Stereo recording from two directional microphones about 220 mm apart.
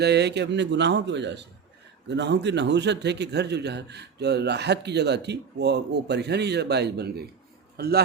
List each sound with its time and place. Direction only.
0.0 s a man's voice: 50° right (ahead or behind)